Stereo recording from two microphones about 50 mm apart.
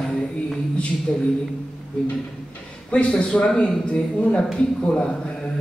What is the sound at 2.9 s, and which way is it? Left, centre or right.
Speech, left.